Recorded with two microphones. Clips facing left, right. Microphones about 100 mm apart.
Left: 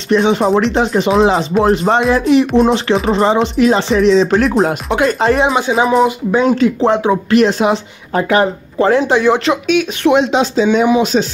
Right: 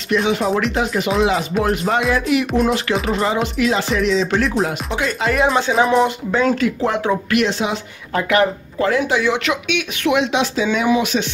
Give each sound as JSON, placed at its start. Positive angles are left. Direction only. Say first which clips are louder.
{"t": 0.1, "sound": "a woman's voice", "louder": "left 6 dB", "side_deg": 30}
{"t": 5.5, "sound": "speech", "louder": "left 2 dB", "side_deg": 5}
{"t": 6.3, "sound": "speech", "louder": "left 5 dB", "side_deg": 20}
{"t": 7.4, "sound": "speech", "louder": "left 7 dB", "side_deg": 45}
{"t": 7.7, "sound": "a woman's voice", "louder": "left 5 dB", "side_deg": 30}